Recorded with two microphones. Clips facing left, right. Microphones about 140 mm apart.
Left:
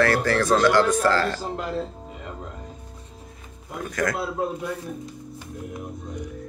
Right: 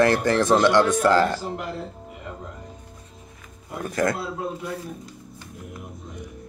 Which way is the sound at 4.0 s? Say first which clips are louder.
Right 3 dB; 30° right (ahead or behind).